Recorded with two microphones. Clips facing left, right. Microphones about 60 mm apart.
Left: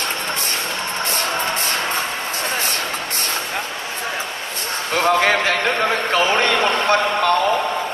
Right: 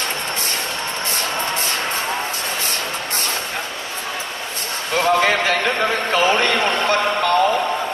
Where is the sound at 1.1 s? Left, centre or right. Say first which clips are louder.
Left 1 dB; left.